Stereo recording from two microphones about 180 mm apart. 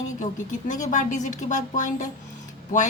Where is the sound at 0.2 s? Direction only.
45° left (ahead or behind).